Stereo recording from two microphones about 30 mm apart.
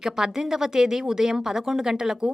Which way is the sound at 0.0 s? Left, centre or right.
Centre.